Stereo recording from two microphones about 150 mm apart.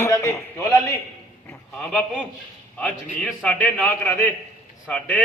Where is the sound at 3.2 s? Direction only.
5° left (ahead or behind).